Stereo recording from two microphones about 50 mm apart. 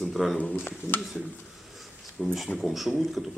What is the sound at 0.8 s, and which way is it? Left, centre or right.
Speech, left.